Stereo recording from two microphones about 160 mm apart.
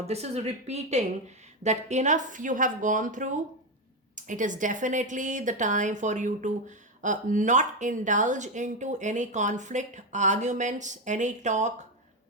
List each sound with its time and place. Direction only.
0.0 s a woman's voice: 40° right (ahead or behind)